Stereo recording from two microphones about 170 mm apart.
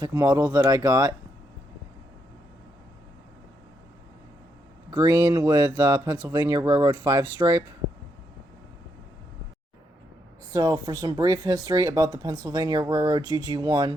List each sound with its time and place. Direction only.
0.0 s speech: 20° right (ahead or behind)
4.9 s speech: 20° right (ahead or behind)
10.5 s speech: 25° right (ahead or behind)